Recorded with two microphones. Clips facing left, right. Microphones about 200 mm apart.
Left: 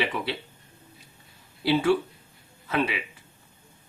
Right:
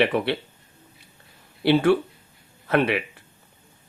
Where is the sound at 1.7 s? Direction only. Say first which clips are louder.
Right 4 dB; 60° right (ahead or behind).